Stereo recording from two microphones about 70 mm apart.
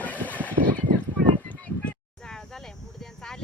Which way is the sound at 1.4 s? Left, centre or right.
Left.